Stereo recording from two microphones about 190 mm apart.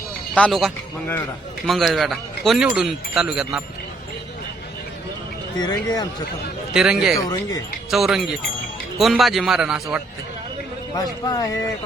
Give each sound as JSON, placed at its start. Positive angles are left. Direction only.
{"t": 0.3, "sound": "a man's voice", "side_deg": 5}
{"t": 5.6, "sound": "speech", "side_deg": 20}
{"t": 6.7, "sound": "speech", "side_deg": -5}
{"t": 10.9, "sound": "speech", "side_deg": 20}